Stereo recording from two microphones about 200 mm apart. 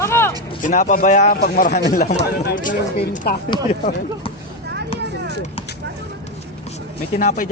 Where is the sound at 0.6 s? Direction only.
40° left (ahead or behind).